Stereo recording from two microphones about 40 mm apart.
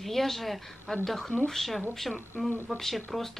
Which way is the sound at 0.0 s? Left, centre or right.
Centre.